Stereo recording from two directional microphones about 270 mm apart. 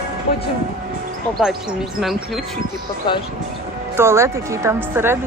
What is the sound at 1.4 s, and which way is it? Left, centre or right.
Speech, centre.